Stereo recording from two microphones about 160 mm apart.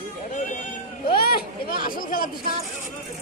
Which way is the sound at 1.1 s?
70° left (ahead or behind).